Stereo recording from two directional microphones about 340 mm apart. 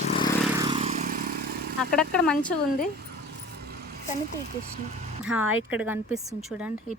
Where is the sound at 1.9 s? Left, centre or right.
Centre.